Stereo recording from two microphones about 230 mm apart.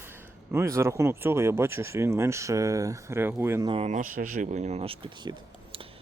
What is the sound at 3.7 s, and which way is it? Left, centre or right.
Speech, right.